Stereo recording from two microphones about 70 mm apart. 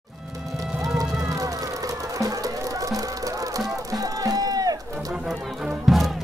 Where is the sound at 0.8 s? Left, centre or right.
Right.